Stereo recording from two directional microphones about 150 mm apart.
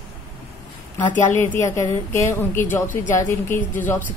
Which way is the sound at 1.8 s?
15° left (ahead or behind).